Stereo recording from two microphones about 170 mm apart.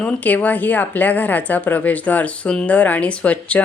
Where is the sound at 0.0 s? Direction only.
10° left (ahead or behind).